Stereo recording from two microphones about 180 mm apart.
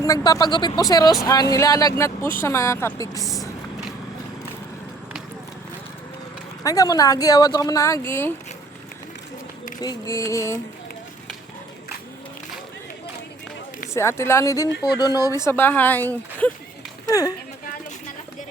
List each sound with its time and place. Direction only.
0.3 s speech: 20° left (ahead or behind)
6.6 s speech: 20° left (ahead or behind)
9.8 s speech: 20° left (ahead or behind)
13.9 s speech: 15° left (ahead or behind)